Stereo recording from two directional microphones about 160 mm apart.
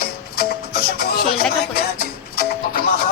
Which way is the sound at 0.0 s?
75° left (ahead or behind).